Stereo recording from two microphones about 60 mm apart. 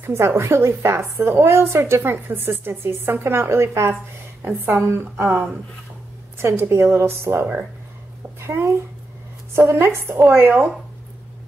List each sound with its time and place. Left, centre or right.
0.0 s a woman's voice: right
6.3 s a woman's voice: right